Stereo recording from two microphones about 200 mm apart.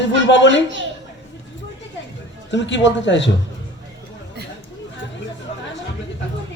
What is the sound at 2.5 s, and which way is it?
Speech, 65° left (ahead or behind).